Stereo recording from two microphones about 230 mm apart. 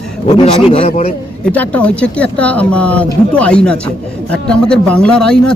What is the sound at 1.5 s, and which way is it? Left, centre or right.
Speech, centre.